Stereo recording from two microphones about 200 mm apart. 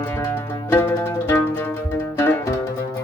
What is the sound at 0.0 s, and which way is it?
Music, 10° left (ahead or behind).